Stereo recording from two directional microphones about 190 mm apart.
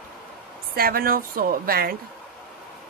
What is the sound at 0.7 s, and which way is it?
A woman's voice, 50° right (ahead or behind).